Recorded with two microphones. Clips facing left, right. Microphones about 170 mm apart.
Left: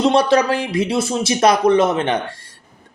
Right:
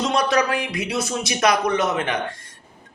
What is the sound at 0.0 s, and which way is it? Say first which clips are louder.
Speech: left 6 dB; 30° left (ahead or behind).